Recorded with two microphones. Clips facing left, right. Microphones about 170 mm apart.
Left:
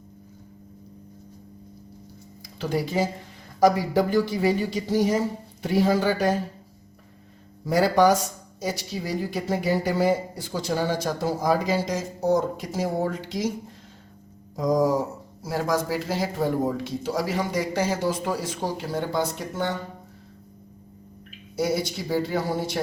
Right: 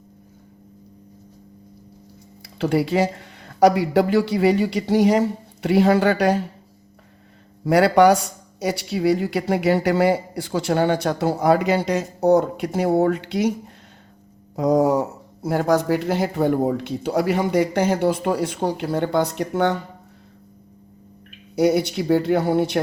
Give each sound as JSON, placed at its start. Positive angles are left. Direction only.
{"t": 2.6, "sound": "speech", "side_deg": -70}
{"t": 7.6, "sound": "speech", "side_deg": -70}
{"t": 14.5, "sound": "speech", "side_deg": -65}
{"t": 21.5, "sound": "speech", "side_deg": -70}